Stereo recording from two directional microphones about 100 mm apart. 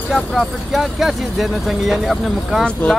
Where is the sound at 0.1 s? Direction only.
Centre (ahead or behind).